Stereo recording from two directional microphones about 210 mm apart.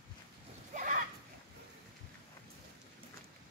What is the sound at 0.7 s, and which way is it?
Splash, 40° right (ahead or behind).